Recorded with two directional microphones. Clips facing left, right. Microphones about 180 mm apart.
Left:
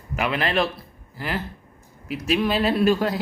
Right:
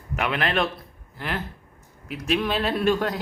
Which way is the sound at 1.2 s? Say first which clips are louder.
Left 2 dB; 5° left (ahead or behind).